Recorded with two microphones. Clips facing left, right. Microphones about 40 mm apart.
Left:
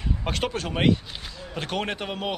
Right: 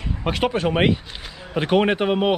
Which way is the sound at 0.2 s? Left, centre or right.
Centre.